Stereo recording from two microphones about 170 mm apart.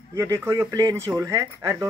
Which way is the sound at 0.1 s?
15° right (ahead or behind).